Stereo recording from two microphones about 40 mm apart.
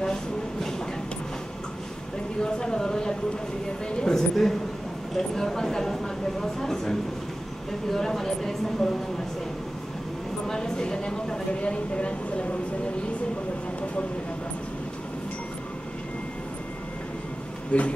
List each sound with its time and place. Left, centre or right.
0.0 s a sound: centre
2.4 s speech: left
10.4 s speech: centre
17.7 s speech: left